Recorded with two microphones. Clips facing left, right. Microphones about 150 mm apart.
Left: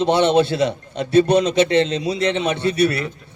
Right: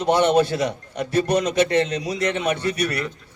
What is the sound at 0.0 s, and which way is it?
Speech, 25° left (ahead or behind).